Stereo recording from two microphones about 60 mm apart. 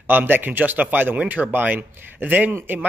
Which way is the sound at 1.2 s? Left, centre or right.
Centre.